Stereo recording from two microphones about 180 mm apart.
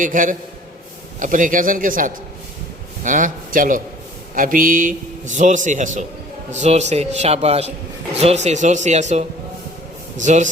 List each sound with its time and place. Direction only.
0.0 s a man's voice: 45° right (ahead or behind)